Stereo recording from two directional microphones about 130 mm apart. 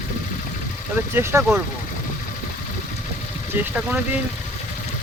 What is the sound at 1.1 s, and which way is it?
Speech, 20° right (ahead or behind).